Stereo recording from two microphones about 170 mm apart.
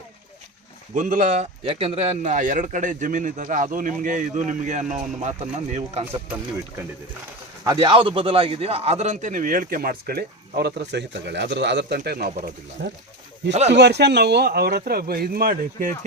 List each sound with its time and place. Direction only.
0.9 s a man's voice: 50° right (ahead or behind)
7.6 s a man's voice: 25° right (ahead or behind); by 12.3 s 60° right (ahead or behind)
12.8 s speech: 85° right
13.5 s speech: 40° right (ahead or behind)
13.7 s a man's voice: 85° right; by 15.9 s 60° right (ahead or behind)